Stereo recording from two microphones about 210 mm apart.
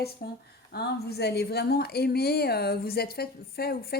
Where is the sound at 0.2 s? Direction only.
50° left (ahead or behind).